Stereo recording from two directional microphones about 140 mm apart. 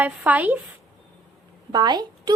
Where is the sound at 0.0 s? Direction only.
10° right (ahead or behind).